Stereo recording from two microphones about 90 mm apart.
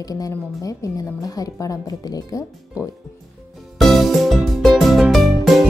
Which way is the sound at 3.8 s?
Centre (ahead or behind).